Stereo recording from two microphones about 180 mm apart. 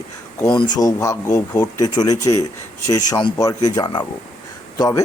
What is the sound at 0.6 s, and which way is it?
Speech, 20° left (ahead or behind).